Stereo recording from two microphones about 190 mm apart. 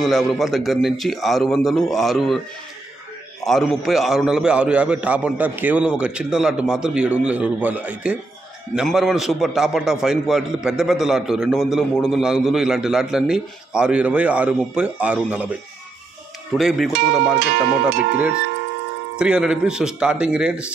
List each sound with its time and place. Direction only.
0.0 s a man's voice: centre (ahead or behind)
3.4 s a man's voice: centre (ahead or behind)
16.5 s a man's voice: centre (ahead or behind)
17.4 s music: 60° right (ahead or behind)
19.1 s a man's voice: 5° right (ahead or behind)